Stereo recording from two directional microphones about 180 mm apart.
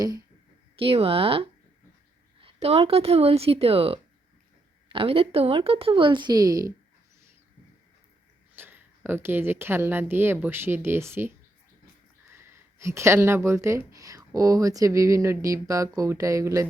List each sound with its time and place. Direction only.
0.8 s a woman's voice: 30° right (ahead or behind)
8.5 s a woman's voice: 10° right (ahead or behind)
12.3 s speech: 15° right (ahead or behind)